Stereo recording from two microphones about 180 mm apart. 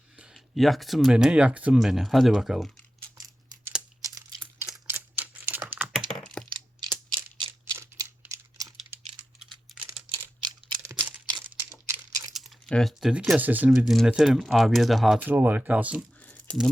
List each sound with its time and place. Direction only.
0.2 s speech: centre (ahead or behind)
4.0 s crumpling: 20° right (ahead or behind)
4.9 s computer keyboard: 10° right (ahead or behind)
6.1 s computer keyboard: 5° left (ahead or behind)
6.5 s computer keyboard: 25° right (ahead or behind)
7.6 s a sound: 15° right (ahead or behind)
9.4 s computer keyboard: 5° right (ahead or behind)
10.8 s a sound: 20° right (ahead or behind)
11.4 s crumpling: 15° right (ahead or behind)
12.3 s speech: centre (ahead or behind)
16.2 s crumpling: 10° left (ahead or behind)